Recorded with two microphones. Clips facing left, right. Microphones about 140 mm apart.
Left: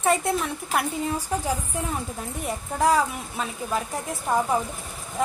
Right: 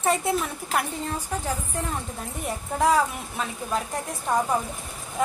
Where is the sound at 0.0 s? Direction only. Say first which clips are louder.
Left 1 dB; centre (ahead or behind).